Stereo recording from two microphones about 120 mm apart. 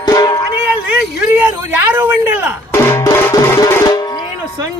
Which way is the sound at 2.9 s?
20° left (ahead or behind).